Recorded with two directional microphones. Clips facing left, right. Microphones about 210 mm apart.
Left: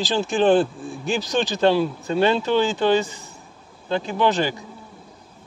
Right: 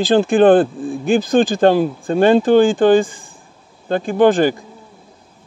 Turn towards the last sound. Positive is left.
turn(degrees=-50)  # may be behind; listen again after turning